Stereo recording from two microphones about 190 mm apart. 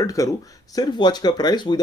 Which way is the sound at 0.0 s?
15° left (ahead or behind).